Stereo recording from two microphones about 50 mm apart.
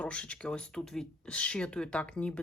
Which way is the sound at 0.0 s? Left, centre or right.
Left.